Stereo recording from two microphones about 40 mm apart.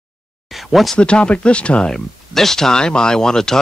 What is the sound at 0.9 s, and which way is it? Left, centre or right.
Speech, left.